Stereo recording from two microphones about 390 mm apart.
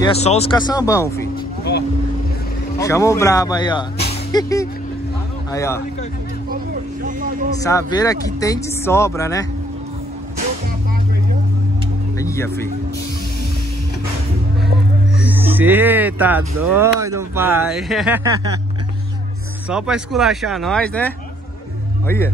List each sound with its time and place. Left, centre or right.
0.0 s speech: centre
1.6 s vehicle: left
2.8 s speech: centre
7.1 s a sound: right
7.6 s speech: centre
12.2 s speech: centre
15.2 s speech: centre
19.7 s speech: centre